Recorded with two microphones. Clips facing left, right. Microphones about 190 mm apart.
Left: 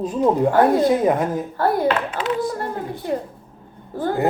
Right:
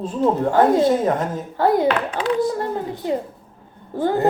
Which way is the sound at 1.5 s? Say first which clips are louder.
Right 3 dB; 20° right (ahead or behind).